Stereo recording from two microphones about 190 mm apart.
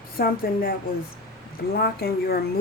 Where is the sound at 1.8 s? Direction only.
55° left (ahead or behind).